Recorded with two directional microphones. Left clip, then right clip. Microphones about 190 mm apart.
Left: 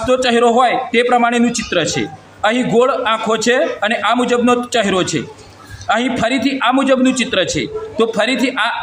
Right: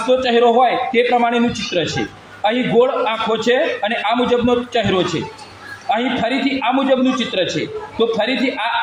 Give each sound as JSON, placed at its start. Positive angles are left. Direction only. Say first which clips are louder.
{"t": 0.1, "sound": "a man's voice", "louder": "left 1 dB", "side_deg": 15}